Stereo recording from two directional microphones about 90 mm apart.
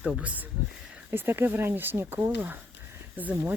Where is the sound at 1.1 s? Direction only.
25° right (ahead or behind).